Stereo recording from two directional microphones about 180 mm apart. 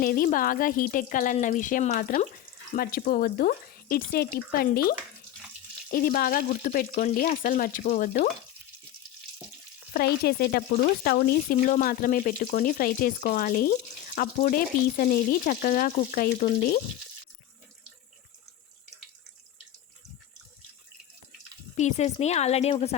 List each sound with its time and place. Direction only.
0.0 s speech: 50° left (ahead or behind)
9.9 s speech: 60° left (ahead or behind)
21.8 s speech: 40° left (ahead or behind)